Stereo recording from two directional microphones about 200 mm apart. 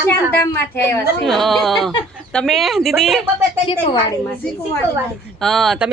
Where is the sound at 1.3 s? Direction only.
Centre (ahead or behind).